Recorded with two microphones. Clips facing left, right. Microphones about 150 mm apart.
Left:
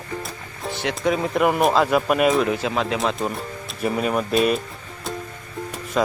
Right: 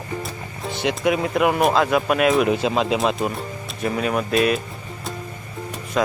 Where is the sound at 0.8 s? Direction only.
10° right (ahead or behind).